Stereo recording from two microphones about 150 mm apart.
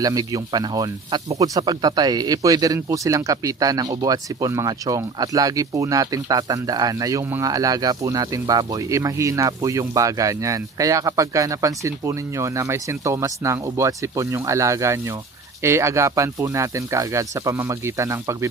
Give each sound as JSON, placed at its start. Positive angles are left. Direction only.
{"t": 0.0, "sound": "speech", "side_deg": -25}